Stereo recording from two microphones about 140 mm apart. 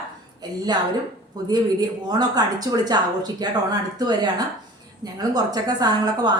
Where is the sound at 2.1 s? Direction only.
30° right (ahead or behind).